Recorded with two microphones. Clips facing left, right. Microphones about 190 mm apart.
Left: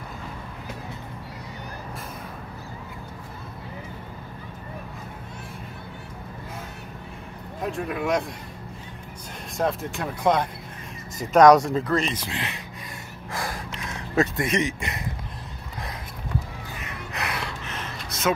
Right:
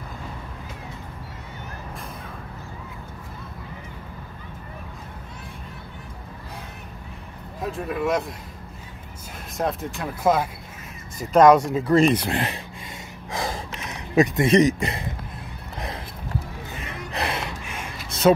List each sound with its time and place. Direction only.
7.6 s speech: centre (ahead or behind)
9.6 s speech: centre (ahead or behind)
12.1 s speech: 60° right (ahead or behind)
13.3 s gasp: 20° right (ahead or behind)
14.5 s speech: 35° right (ahead or behind)
17.1 s gasp: 30° right (ahead or behind)
17.6 s a sound: 10° right (ahead or behind)
18.3 s speech: 35° right (ahead or behind)